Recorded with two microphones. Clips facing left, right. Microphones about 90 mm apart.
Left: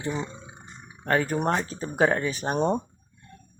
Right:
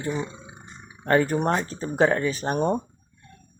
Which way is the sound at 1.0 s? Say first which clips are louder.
Right 3 dB; centre (ahead or behind).